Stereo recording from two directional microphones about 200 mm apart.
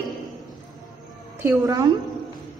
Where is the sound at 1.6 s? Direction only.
15° right (ahead or behind).